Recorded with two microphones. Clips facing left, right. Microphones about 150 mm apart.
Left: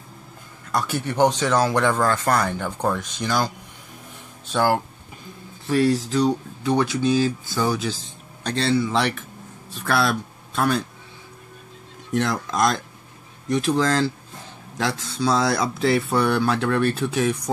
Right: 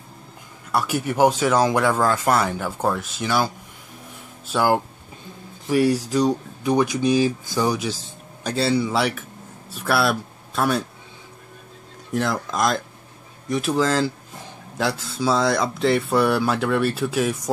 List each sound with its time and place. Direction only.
0.7 s speech: 10° right (ahead or behind)
12.1 s speech: centre (ahead or behind)